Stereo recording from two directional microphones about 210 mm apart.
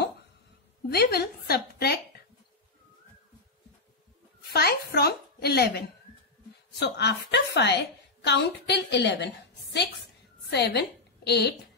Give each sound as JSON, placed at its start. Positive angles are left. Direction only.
{"t": 0.8, "sound": "a woman's voice", "side_deg": 50}
{"t": 4.5, "sound": "a sound", "side_deg": 50}
{"t": 6.8, "sound": "a woman's voice", "side_deg": 55}
{"t": 10.5, "sound": "a woman's voice", "side_deg": 55}